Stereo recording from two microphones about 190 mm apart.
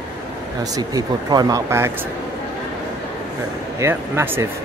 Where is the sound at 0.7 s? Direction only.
20° right (ahead or behind).